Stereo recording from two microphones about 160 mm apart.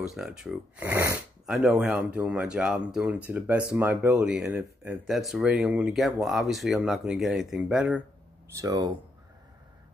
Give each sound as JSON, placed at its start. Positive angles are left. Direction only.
{"t": 0.0, "sound": "speech", "side_deg": -5}
{"t": 8.5, "sound": "speech", "side_deg": -20}